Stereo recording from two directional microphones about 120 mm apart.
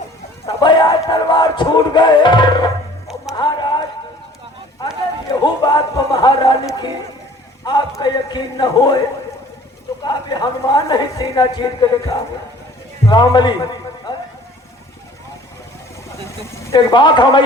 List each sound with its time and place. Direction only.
0.4 s music: 40° left (ahead or behind)
3.3 s a sound: 40° left (ahead or behind)
5.4 s music: 35° left (ahead or behind)
7.6 s a man's voice: 35° left (ahead or behind)
10.0 s music: 35° left (ahead or behind)
16.7 s music: 40° left (ahead or behind)